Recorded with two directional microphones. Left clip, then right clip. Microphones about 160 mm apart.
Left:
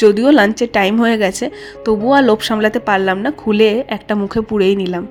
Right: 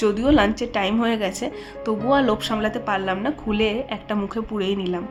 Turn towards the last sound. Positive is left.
turn(degrees=35)  # may be behind; listen again after turning